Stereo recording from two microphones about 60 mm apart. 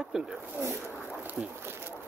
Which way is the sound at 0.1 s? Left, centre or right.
Centre.